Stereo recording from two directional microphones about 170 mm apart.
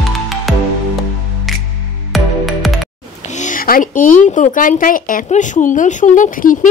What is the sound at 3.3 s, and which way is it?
Speech, 45° left (ahead or behind).